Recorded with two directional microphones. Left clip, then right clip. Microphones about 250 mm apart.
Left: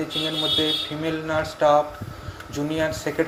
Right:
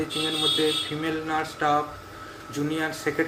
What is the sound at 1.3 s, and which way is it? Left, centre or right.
Speech, centre.